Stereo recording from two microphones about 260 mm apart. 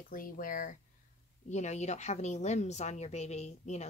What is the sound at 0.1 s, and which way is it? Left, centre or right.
A woman's voice, left.